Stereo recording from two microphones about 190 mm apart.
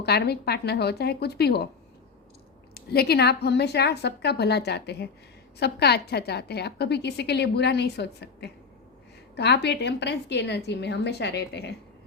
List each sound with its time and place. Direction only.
0.0 s a woman's voice: 60° left (ahead or behind)
2.7 s a woman's voice: 55° left (ahead or behind)